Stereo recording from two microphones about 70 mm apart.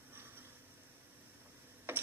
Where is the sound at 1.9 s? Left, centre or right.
Right.